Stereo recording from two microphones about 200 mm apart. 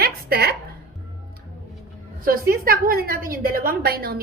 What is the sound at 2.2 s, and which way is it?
A woman's voice, 45° right (ahead or behind).